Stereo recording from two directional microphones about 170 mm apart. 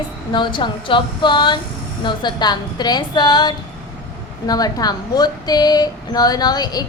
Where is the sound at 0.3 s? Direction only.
25° left (ahead or behind).